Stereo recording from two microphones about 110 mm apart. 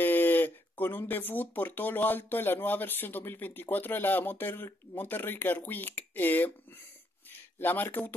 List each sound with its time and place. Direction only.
0.0 s speech: 15° left (ahead or behind)
7.5 s speech: 15° left (ahead or behind)